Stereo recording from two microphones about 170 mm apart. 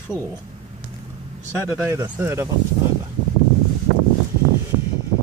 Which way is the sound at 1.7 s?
15° right (ahead or behind).